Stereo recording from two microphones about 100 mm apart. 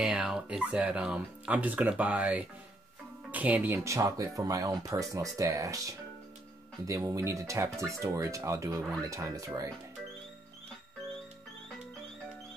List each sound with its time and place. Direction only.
0.0 s speech: 5° right (ahead or behind); by 5.9 s 35° right (ahead or behind)
7.0 s speech: 30° right (ahead or behind)